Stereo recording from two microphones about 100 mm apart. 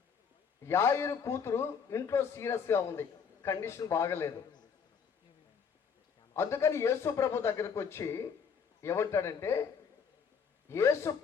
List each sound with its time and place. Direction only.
0.6 s a man's voice: 30° left (ahead or behind)
6.3 s a man's voice: 25° left (ahead or behind)
10.7 s a man's voice: 25° left (ahead or behind)